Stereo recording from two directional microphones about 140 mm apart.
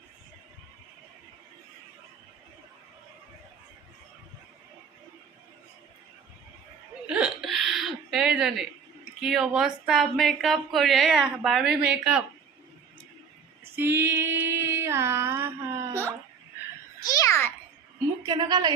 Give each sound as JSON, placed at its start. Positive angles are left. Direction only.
{"t": 7.1, "sound": "hiccup", "side_deg": -5}
{"t": 9.2, "sound": "speech", "side_deg": -5}
{"t": 13.7, "sound": "female singing", "side_deg": -15}
{"t": 17.0, "sound": "a sound", "side_deg": 25}
{"t": 18.2, "sound": "a woman's voice", "side_deg": -30}